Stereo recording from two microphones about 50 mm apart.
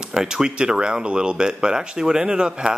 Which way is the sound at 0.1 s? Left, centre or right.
Centre.